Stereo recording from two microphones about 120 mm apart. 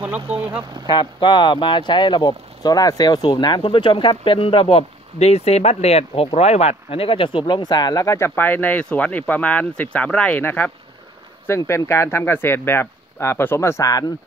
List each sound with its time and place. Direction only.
0.0 s speech: 10° right (ahead or behind)
0.8 s speech: 40° left (ahead or behind)